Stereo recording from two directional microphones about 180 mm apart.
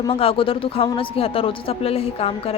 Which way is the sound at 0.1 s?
30° left (ahead or behind).